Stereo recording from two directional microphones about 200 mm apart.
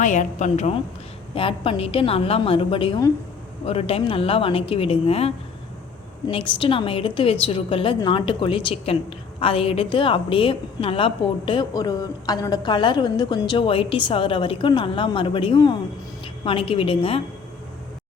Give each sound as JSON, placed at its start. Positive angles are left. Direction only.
{"t": 0.0, "sound": "a woman's voice", "side_deg": 40}